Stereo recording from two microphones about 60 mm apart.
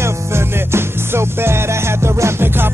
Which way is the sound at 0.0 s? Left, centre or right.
Right.